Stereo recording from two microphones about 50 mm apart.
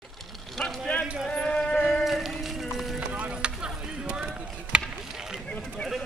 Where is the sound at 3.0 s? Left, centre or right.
Right.